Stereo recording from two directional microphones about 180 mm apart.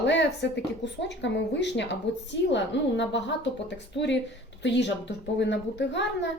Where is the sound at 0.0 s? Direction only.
80° left.